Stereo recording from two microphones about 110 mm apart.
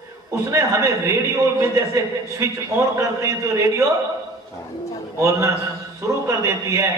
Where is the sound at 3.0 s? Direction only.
25° right (ahead or behind).